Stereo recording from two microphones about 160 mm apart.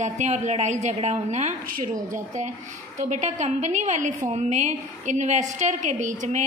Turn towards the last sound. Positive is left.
turn(degrees=-50)  # may be behind; listen again after turning